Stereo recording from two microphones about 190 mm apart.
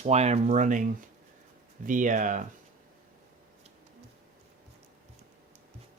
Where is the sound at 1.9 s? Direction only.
45° right (ahead or behind).